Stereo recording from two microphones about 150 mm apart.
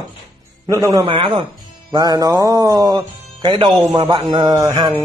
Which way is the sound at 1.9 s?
25° right (ahead or behind).